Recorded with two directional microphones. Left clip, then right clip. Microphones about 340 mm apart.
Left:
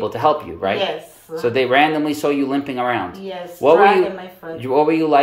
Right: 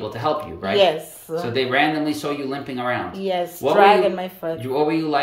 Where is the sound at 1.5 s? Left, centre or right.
Centre.